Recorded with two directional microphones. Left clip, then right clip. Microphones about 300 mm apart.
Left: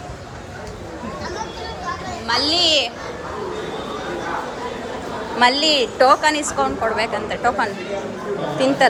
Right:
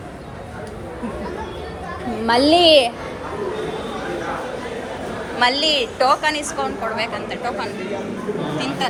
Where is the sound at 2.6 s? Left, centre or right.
Centre.